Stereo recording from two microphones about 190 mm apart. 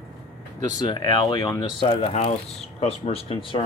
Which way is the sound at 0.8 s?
25° left (ahead or behind).